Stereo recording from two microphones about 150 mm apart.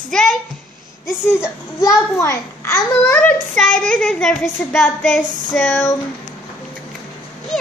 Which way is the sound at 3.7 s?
60° right (ahead or behind).